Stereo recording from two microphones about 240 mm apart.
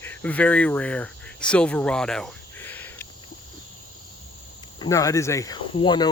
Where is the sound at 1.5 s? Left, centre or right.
Centre.